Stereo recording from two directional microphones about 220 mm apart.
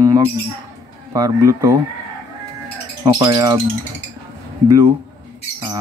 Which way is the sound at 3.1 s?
20° right (ahead or behind).